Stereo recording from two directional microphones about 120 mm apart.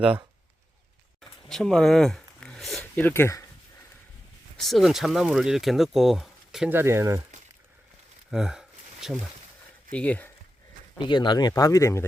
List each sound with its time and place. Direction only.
1.5 s speech: 5° left (ahead or behind)
2.9 s speech: 15° left (ahead or behind)
4.5 s speech: centre (ahead or behind)
6.7 s speech: 20° right (ahead or behind)
8.3 s a sound: 5° right (ahead or behind)
9.9 s speech: 10° left (ahead or behind)
10.9 s speech: 40° left (ahead or behind)